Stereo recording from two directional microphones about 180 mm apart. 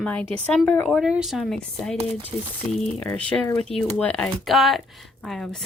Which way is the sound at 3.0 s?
5° left (ahead or behind).